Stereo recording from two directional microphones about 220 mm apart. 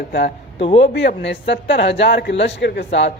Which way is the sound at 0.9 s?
55° left (ahead or behind).